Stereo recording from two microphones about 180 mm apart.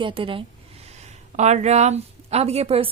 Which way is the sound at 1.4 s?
40° right (ahead or behind).